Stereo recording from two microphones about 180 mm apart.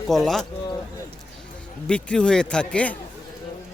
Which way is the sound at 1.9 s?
5° left (ahead or behind).